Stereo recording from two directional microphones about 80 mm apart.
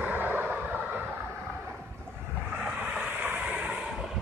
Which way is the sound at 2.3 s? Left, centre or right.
Right.